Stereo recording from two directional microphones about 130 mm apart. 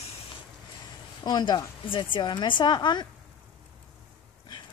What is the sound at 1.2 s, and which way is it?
Speech, 35° left (ahead or behind).